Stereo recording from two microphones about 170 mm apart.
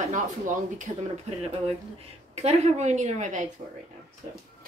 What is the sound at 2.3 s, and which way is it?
A woman's voice, 40° right (ahead or behind).